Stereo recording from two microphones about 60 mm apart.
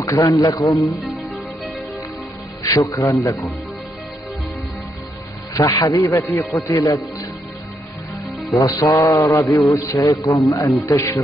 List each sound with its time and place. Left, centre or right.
0.0 s a man's voice: left
2.6 s speech: left
5.5 s a man's voice: left
8.5 s speech: left